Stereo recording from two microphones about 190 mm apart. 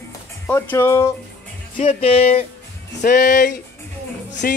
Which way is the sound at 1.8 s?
35° left (ahead or behind).